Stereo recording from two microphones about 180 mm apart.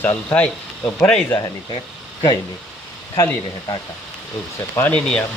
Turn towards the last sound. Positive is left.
turn(degrees=5)  # may be behind; listen again after turning